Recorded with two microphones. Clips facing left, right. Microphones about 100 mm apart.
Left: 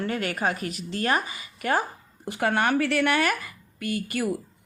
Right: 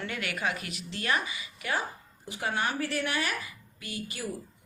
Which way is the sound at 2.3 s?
60° left (ahead or behind).